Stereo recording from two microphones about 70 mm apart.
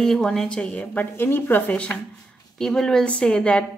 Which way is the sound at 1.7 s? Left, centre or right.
Centre.